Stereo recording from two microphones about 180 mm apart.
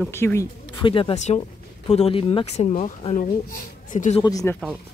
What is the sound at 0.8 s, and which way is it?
Speech, 30° left (ahead or behind).